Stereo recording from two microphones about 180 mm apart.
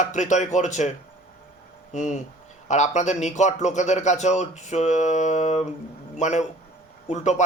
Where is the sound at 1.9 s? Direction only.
40° left (ahead or behind).